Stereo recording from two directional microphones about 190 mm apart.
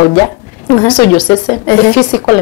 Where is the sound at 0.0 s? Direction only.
20° left (ahead or behind).